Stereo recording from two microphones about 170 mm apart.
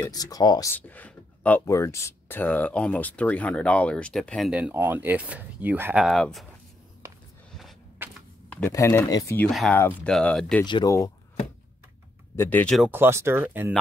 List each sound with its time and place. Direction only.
0.0 s speech: 20° left (ahead or behind)
0.7 s speech: 10° left (ahead or behind)
8.0 s a sound: 10° right (ahead or behind)
8.5 s speech: 10° left (ahead or behind)
9.5 s speech: centre (ahead or behind)
9.8 s speech: 15° left (ahead or behind)
10.1 s speech: 5° left (ahead or behind)
10.6 s speech: 25° left (ahead or behind)
12.4 s speech: 10° left (ahead or behind)
12.8 s speech: 10° right (ahead or behind)